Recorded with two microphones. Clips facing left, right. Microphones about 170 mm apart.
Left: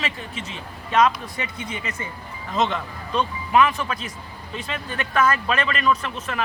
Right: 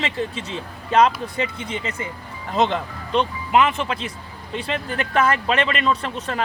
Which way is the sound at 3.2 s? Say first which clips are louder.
Right 1 dB; 25° right (ahead or behind).